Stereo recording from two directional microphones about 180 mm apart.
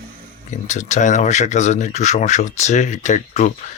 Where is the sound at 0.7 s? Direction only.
40° left (ahead or behind).